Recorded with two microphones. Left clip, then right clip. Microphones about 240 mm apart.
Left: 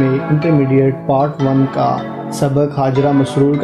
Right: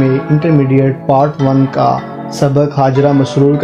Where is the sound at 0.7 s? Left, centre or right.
Right.